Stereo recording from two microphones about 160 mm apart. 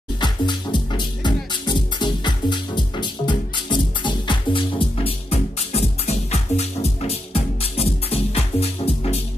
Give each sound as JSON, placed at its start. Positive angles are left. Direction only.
{"t": 0.2, "sound": "music", "side_deg": 30}